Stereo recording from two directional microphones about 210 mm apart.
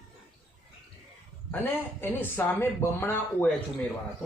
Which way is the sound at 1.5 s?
10° left (ahead or behind).